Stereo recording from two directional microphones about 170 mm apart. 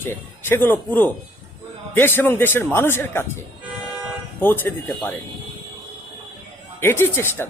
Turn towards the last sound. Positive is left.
turn(degrees=15)  # may be behind; listen again after turning